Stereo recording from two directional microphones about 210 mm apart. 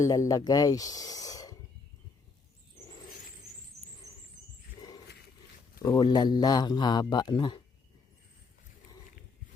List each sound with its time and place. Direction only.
0.0 s speech: 15° left (ahead or behind)
4.1 s a sound: 15° right (ahead or behind)
5.8 s a man's voice: 20° left (ahead or behind)